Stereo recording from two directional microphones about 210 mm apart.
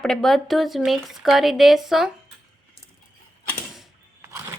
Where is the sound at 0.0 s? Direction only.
5° left (ahead or behind).